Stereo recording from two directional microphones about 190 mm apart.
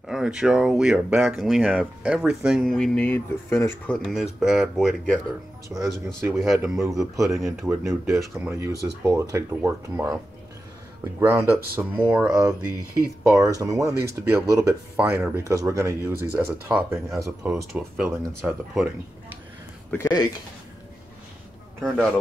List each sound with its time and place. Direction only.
0.1 s speech: 5° right (ahead or behind)
7.6 s speech: 15° right (ahead or behind)
11.1 s speech: 10° right (ahead or behind)
19.9 s speech: 15° left (ahead or behind)
21.8 s speech: 5° left (ahead or behind)